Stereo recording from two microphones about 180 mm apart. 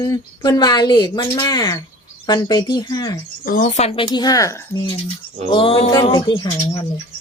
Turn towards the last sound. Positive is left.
turn(degrees=25)  # may be behind; listen again after turning